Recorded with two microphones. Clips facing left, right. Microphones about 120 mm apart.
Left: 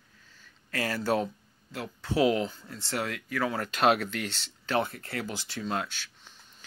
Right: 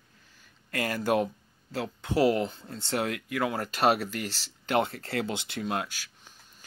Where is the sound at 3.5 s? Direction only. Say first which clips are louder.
Left 1 dB; 40° right (ahead or behind).